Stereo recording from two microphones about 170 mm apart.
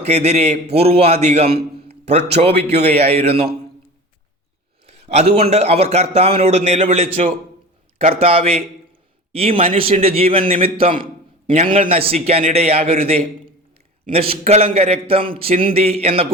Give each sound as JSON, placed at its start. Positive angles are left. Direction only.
{"t": 0.1, "sound": "a man's voice", "side_deg": -40}
{"t": 4.9, "sound": "a man's voice", "side_deg": -40}